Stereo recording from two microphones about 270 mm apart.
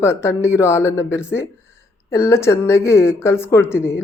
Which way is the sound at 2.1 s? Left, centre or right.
Centre.